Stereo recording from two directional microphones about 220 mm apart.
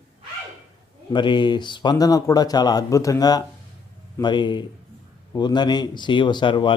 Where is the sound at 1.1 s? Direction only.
20° left (ahead or behind).